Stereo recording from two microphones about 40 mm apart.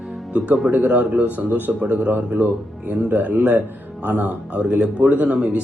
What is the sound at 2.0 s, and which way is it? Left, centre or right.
Speech, right.